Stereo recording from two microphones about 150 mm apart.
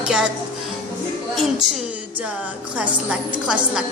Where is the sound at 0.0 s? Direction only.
5° right (ahead or behind).